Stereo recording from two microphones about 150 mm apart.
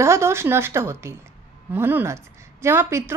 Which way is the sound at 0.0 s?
20° right (ahead or behind).